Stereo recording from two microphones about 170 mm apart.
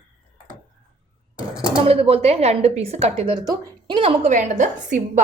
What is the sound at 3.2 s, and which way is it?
Speech, 30° right (ahead or behind).